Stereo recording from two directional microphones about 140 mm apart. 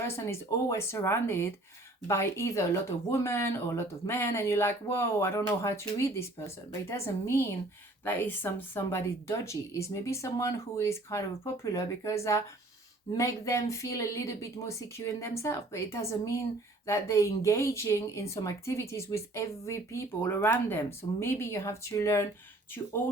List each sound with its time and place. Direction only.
0.1 s a woman's voice: 20° left (ahead or behind)